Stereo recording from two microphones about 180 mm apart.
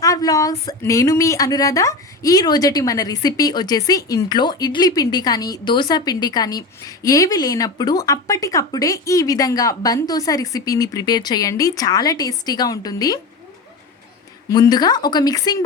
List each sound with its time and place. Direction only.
0.0 s a woman's voice: 20° left (ahead or behind)
14.5 s a woman's voice: 20° left (ahead or behind)